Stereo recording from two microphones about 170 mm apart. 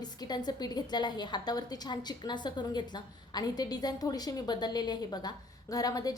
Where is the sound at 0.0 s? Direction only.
25° left (ahead or behind).